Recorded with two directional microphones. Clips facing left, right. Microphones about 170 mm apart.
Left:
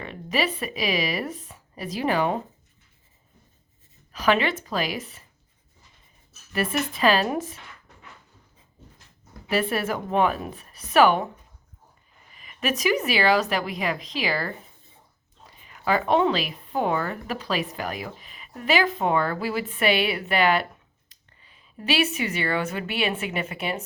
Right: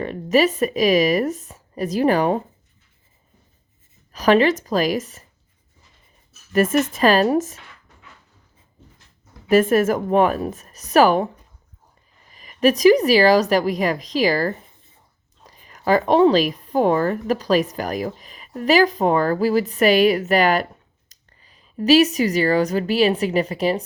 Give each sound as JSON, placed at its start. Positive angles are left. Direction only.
{"t": 0.0, "sound": "speech", "side_deg": -40}
{"t": 4.1, "sound": "speech", "side_deg": -40}
{"t": 6.5, "sound": "a woman's voice", "side_deg": -45}
{"t": 9.5, "sound": "a woman's voice", "side_deg": -45}
{"t": 12.3, "sound": "a woman's voice", "side_deg": -35}